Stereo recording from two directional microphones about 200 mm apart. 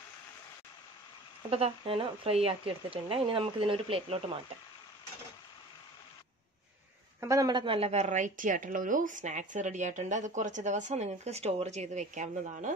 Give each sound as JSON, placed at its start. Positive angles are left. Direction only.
{"t": 1.5, "sound": "speech", "side_deg": -30}
{"t": 7.2, "sound": "a woman's voice", "side_deg": -15}